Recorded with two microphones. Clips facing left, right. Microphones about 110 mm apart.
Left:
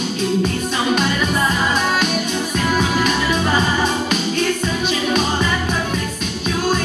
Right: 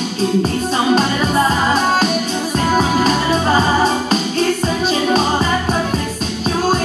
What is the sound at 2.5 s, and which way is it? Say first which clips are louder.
Music: right 4 dB; 35° right (ahead or behind).